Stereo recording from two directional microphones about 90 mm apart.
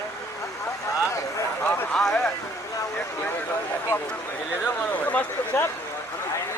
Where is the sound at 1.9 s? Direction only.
5° left (ahead or behind).